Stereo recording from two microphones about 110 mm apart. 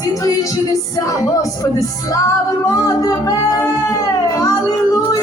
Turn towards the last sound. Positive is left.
turn(degrees=30)  # may be behind; listen again after turning